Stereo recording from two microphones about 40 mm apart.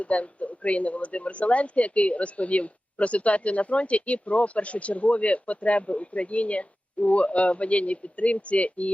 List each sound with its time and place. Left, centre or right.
0.0 s speech: left